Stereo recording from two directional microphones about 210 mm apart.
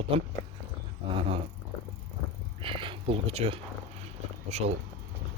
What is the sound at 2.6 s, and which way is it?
Speech, 25° right (ahead or behind).